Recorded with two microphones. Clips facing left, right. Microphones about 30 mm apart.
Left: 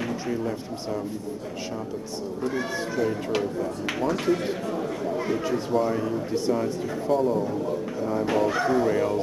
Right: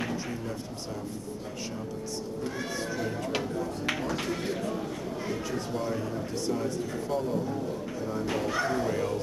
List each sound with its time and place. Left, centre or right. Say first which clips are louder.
2.4 s speech: left 7 dB; centre